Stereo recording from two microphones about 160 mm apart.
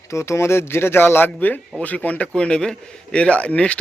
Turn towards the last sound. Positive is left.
turn(degrees=5)  # may be behind; listen again after turning